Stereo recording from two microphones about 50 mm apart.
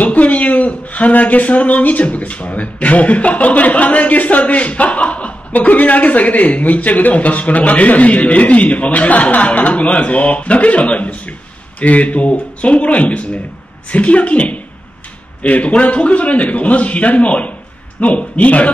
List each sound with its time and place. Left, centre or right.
0.0 s speech: left